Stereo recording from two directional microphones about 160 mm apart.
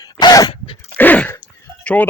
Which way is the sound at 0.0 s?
25° left (ahead or behind).